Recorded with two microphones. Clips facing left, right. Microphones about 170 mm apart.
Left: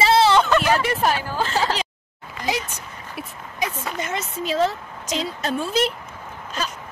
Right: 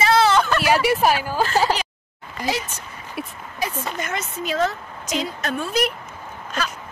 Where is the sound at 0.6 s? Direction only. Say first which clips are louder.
Right 2 dB; 10° right (ahead or behind).